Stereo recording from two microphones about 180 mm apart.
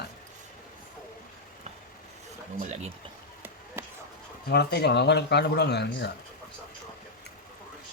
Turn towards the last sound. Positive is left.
turn(degrees=65)  # may be behind; listen again after turning